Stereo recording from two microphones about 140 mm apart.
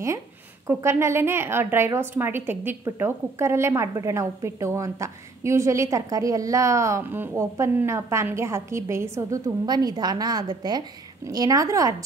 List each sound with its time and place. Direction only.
0.7 s a woman's voice: 20° right (ahead or behind)